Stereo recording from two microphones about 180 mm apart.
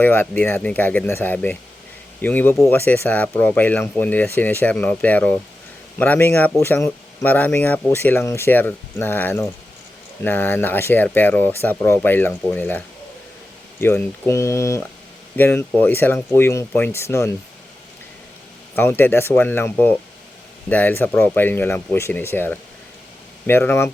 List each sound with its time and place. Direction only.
0.0 s speech: 10° left (ahead or behind)
13.8 s speech: 10° left (ahead or behind)
18.8 s speech: 10° left (ahead or behind)